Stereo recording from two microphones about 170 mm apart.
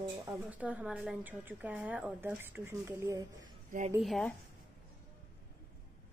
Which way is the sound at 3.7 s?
45° right (ahead or behind).